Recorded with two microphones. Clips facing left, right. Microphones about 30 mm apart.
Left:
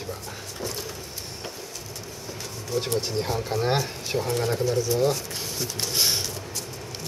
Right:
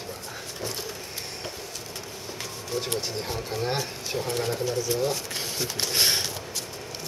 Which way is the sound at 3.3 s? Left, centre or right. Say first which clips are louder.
Left 4 dB; centre.